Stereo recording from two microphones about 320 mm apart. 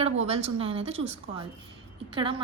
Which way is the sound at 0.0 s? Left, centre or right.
Centre.